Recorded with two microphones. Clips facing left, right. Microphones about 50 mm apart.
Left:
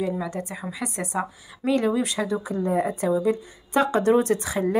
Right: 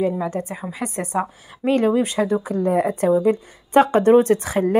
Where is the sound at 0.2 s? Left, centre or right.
Right.